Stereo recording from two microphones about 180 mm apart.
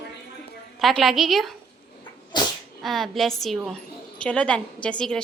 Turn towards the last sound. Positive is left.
turn(degrees=5)  # may be behind; listen again after turning